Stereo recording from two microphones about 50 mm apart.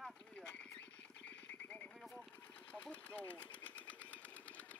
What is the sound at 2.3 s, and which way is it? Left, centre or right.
Engine, left.